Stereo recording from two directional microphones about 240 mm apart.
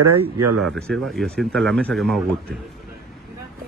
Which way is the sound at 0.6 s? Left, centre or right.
Centre.